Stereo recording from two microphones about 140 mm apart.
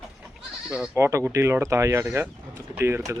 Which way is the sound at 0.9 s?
20° right (ahead or behind).